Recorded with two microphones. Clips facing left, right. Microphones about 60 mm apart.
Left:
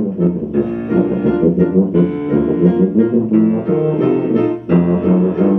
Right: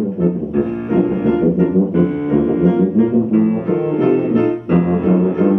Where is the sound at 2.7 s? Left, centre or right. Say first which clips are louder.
Left 1 dB; centre.